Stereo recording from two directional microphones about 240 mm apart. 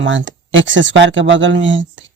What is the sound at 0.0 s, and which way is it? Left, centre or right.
A man's voice, right.